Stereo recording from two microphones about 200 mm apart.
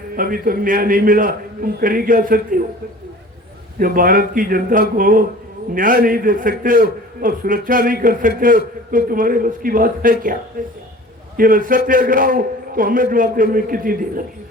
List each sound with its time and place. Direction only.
0.2 s a man's voice: 45° right (ahead or behind)
3.8 s a man's voice: 45° right (ahead or behind)